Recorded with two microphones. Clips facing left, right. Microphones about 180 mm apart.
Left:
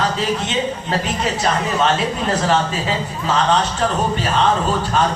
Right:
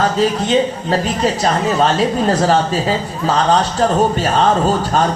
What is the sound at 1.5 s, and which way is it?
A man's voice, 35° right (ahead or behind).